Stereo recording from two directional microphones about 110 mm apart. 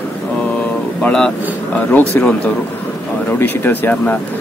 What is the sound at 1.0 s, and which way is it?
Vehicle, 10° left (ahead or behind).